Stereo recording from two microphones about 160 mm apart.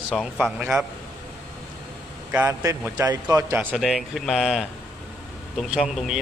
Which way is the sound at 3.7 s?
Centre (ahead or behind).